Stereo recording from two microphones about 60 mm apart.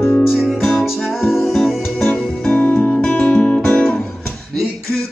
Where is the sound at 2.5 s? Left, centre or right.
Left.